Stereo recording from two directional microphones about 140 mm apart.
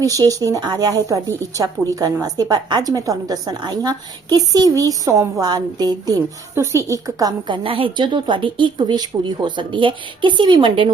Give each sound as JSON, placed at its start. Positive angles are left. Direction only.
{"t": 0.0, "sound": "a woman's voice", "side_deg": -25}